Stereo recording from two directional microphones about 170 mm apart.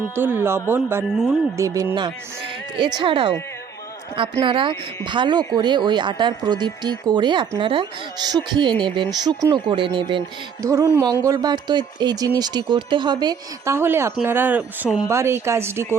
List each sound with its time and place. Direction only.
0.2 s speech: 10° right (ahead or behind)
13.7 s speech: 15° right (ahead or behind)